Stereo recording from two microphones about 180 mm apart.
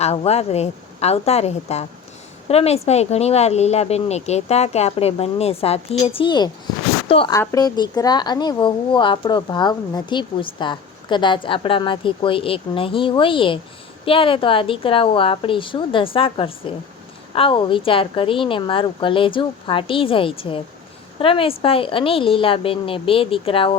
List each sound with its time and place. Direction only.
0.0 s a woman's voice: 35° left (ahead or behind)